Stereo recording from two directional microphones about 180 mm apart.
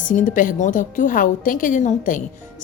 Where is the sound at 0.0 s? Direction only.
45° left (ahead or behind).